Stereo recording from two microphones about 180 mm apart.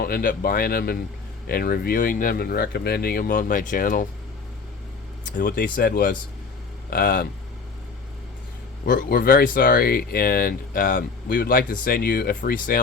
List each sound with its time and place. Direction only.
0.0 s speech: 55° left (ahead or behind)
5.2 s speech: 55° left (ahead or behind)
8.8 s speech: 50° left (ahead or behind)